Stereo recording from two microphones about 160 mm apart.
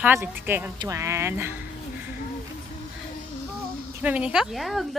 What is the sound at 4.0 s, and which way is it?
Speech, 10° right (ahead or behind).